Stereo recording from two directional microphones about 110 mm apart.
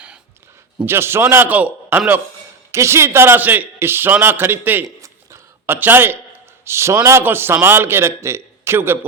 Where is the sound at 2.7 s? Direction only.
25° right (ahead or behind).